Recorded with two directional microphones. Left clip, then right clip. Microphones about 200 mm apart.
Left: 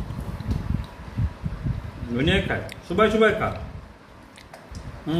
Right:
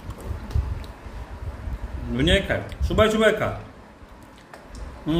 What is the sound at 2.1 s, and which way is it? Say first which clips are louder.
A man's voice: right 2 dB; 40° right (ahead or behind).